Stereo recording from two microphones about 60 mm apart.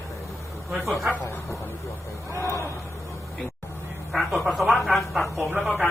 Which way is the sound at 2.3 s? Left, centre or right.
Left.